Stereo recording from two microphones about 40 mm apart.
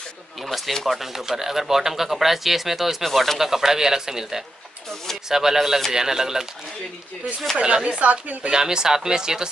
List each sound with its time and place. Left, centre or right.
0.5 s speech: centre
3.0 s speech: centre
3.3 s speech: centre
7.5 s speech: right
8.0 s speech: right
8.5 s speech: centre